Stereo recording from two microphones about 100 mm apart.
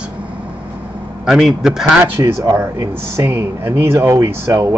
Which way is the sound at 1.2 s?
5° right (ahead or behind).